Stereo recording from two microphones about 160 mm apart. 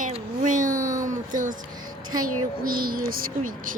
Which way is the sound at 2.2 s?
65° right (ahead or behind).